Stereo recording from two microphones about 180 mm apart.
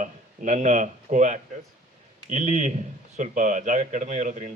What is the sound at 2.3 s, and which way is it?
Speech, 40° right (ahead or behind).